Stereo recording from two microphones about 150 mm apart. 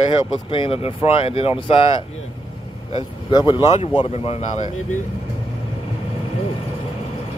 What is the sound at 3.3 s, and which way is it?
Speech, 30° left (ahead or behind).